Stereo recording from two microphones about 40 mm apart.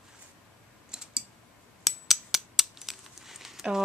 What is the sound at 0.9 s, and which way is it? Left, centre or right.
Clicking, centre.